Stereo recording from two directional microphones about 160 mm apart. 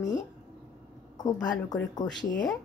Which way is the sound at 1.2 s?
25° left (ahead or behind).